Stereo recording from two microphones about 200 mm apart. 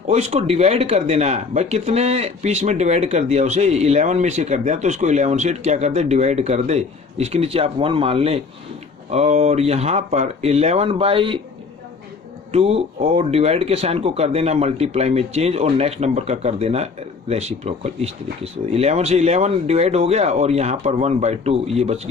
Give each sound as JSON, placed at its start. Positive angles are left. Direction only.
{"t": 0.1, "sound": "speech", "side_deg": -30}
{"t": 12.5, "sound": "speech", "side_deg": -30}